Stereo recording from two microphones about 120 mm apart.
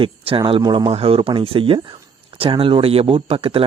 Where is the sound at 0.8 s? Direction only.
50° right (ahead or behind).